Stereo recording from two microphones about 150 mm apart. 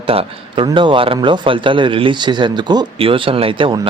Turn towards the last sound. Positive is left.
turn(degrees=-35)  # may be behind; listen again after turning